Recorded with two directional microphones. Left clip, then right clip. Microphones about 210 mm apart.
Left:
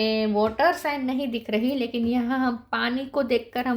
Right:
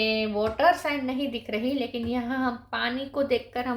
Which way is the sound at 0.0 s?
40° left (ahead or behind).